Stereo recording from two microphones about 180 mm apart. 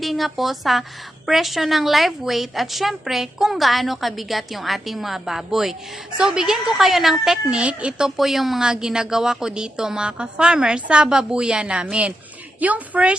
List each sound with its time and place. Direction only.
0.0 s a woman's voice: centre (ahead or behind)